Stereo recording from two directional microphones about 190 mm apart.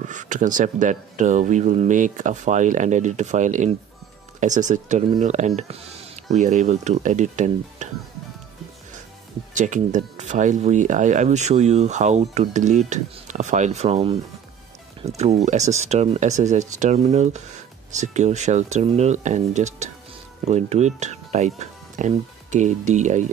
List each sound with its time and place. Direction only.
0.0 s speech: 40° right (ahead or behind)
5.6 s a sound: 35° right (ahead or behind)
6.3 s speech: 40° right (ahead or behind)
9.5 s speech: 40° right (ahead or behind)